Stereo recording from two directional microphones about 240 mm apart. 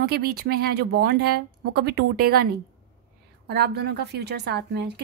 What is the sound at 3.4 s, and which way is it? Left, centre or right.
A woman's voice, right.